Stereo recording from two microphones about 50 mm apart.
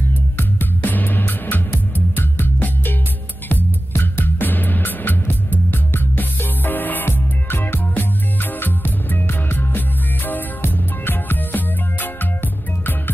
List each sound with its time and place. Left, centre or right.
0.4 s music: left